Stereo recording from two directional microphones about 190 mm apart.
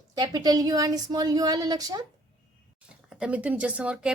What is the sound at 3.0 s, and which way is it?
A woman's voice, 5° right (ahead or behind).